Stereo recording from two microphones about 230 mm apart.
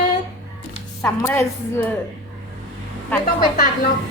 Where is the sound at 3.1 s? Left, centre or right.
Centre.